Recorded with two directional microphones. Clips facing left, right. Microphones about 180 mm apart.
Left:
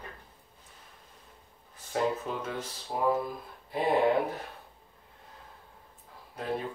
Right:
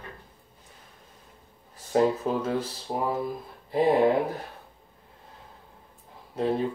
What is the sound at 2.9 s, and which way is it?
Speech, 30° right (ahead or behind).